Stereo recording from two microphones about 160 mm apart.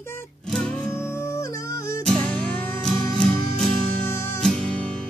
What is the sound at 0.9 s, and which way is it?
Music, 15° left (ahead or behind).